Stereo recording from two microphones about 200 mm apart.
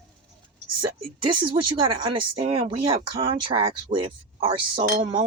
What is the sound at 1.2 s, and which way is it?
Speech, 25° right (ahead or behind).